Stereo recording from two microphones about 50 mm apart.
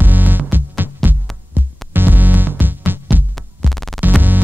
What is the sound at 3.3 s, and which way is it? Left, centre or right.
Music, centre.